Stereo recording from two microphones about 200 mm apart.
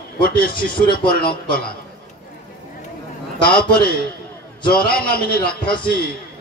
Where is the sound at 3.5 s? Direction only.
50° left (ahead or behind).